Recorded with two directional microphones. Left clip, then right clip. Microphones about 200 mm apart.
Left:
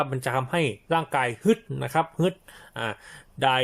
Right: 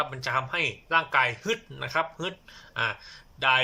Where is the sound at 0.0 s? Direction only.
35° left (ahead or behind).